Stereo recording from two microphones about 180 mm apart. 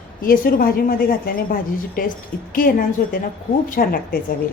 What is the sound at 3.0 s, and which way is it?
A woman's voice, 50° left (ahead or behind).